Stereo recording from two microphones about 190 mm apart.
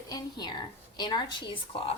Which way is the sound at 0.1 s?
20° left (ahead or behind).